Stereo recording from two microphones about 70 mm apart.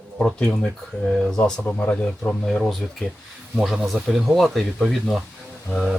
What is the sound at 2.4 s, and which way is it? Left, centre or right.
Speech, centre.